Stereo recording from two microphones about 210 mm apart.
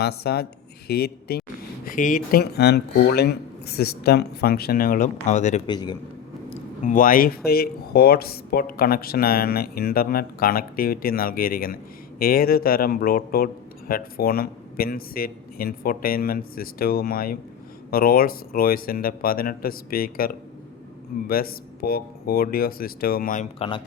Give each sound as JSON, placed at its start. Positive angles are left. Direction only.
{"t": 0.2, "sound": "speech", "side_deg": 50}
{"t": 5.6, "sound": "a man's voice", "side_deg": 20}
{"t": 6.8, "sound": "speech", "side_deg": 40}